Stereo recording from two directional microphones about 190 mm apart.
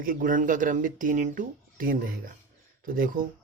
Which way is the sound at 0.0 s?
45° right (ahead or behind).